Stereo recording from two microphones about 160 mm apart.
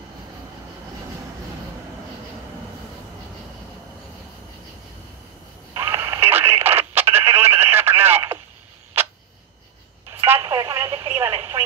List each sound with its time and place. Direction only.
5.8 s radio: 15° right (ahead or behind)
10.2 s radio: 15° right (ahead or behind)